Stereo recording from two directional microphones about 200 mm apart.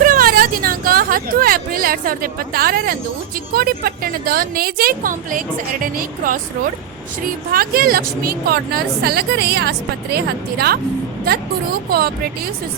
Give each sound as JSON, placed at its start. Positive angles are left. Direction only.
{"t": 0.0, "sound": "hubbub", "side_deg": -45}
{"t": 3.5, "sound": "a woman's voice", "side_deg": -50}
{"t": 7.5, "sound": "a woman's voice", "side_deg": -45}
{"t": 11.9, "sound": "a woman's voice", "side_deg": -50}